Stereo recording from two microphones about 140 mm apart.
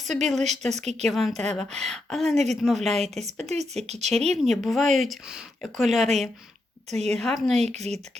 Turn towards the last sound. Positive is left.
turn(degrees=-50)  # may be behind; listen again after turning